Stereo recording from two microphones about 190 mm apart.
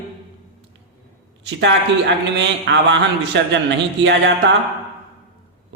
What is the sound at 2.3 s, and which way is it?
A man's voice, 65° right (ahead or behind).